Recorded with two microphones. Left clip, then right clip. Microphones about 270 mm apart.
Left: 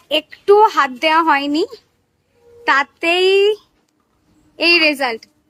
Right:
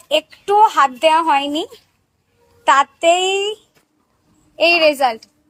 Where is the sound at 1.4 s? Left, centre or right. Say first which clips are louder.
Left 3 dB; left.